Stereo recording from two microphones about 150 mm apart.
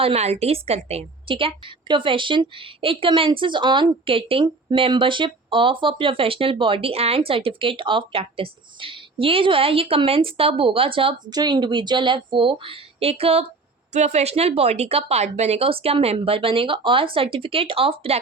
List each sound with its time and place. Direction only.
0.0 s a woman's voice: 45° right (ahead or behind)